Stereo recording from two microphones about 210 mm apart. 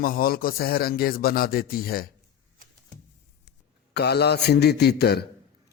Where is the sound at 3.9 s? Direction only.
50° left (ahead or behind).